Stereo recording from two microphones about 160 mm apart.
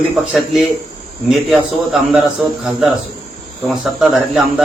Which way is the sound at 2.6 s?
Centre (ahead or behind).